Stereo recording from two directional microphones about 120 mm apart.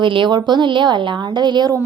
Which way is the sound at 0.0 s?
45° right (ahead or behind).